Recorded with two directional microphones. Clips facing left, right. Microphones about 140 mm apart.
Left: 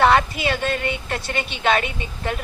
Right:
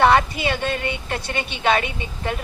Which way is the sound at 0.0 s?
25° right (ahead or behind).